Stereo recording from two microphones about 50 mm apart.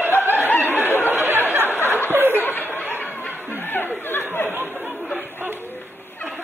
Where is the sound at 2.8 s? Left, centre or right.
Left.